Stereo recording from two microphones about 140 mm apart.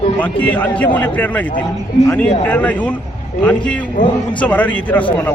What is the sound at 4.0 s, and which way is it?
Speech, 70° left (ahead or behind).